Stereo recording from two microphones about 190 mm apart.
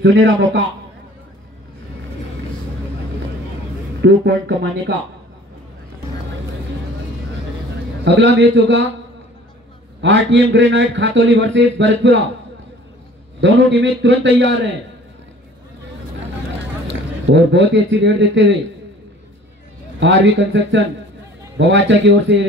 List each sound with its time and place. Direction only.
0.0 s speech: 65° right (ahead or behind)
4.0 s speech: 65° right (ahead or behind)
8.0 s a man's voice: 65° right (ahead or behind)
10.0 s a man's voice: 70° right (ahead or behind)
13.4 s a man's voice: 70° right (ahead or behind)
16.8 s a man's voice: 70° right (ahead or behind)
20.0 s a man's voice: 70° right (ahead or behind)